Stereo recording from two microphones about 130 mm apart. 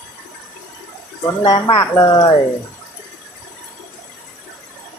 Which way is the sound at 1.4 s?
30° left (ahead or behind).